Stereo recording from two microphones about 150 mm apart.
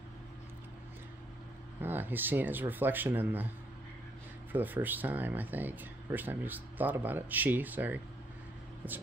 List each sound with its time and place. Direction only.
1.8 s speech: 15° right (ahead or behind)
4.5 s speech: 10° right (ahead or behind)